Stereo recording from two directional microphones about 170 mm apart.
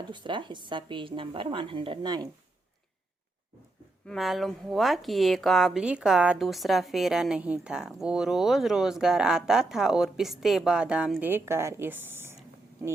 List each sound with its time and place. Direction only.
0.1 s a woman's voice: 30° right (ahead or behind)
4.0 s speech: centre (ahead or behind)